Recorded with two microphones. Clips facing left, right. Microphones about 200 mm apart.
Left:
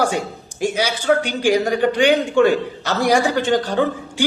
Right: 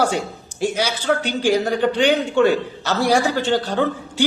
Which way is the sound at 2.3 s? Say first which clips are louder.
Even; 50° left (ahead or behind).